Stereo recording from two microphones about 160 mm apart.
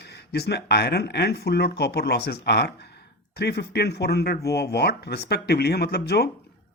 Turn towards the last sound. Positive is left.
turn(degrees=90)